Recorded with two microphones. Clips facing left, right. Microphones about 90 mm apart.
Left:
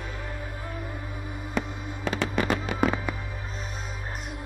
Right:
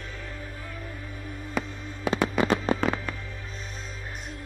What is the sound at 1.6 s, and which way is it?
Music, centre (ahead or behind).